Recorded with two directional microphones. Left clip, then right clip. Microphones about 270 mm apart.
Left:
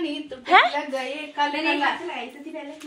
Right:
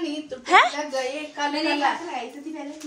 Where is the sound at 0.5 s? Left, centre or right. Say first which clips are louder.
Even; centre.